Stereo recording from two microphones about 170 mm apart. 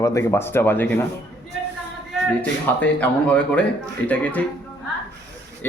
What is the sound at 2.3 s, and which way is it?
Speech, 10° left (ahead or behind).